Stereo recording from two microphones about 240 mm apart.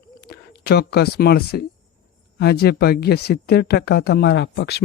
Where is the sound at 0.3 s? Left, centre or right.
Left.